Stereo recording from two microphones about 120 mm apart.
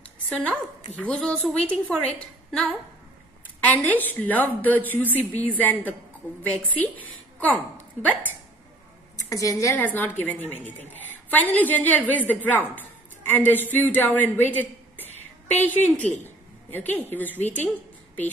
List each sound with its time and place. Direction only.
0.0 s a sound: 10° left (ahead or behind)
0.9 s a woman's voice: 10° left (ahead or behind)
7.3 s speech: 15° left (ahead or behind)
9.1 s a woman's voice: 25° left (ahead or behind)
9.8 s a woman's voice: 15° left (ahead or behind)